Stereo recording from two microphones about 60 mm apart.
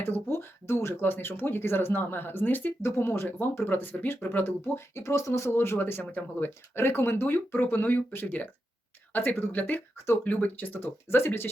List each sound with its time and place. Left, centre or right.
0.0 s speech: left
2.8 s speech: left
3.2 s speech: left
4.9 s speech: left
5.8 s speech: left
10.8 s speech: left